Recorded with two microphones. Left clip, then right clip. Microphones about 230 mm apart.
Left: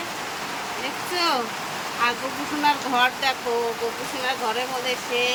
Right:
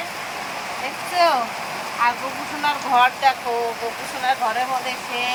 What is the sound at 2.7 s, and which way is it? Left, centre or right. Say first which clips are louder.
Speech: right 3 dB; centre.